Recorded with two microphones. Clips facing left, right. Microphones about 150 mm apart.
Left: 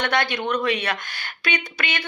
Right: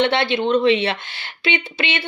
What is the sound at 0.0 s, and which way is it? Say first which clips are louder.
A woman's voice: right 5 dB; 25° right (ahead or behind).